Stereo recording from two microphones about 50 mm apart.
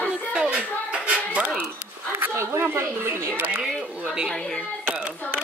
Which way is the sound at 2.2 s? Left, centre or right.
Right.